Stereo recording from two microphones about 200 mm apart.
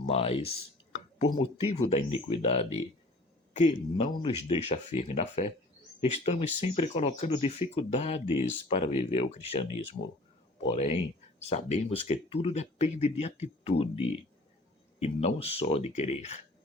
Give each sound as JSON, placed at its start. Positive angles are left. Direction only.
{"t": 0.0, "sound": "speech", "side_deg": 30}
{"t": 10.7, "sound": "speech", "side_deg": 30}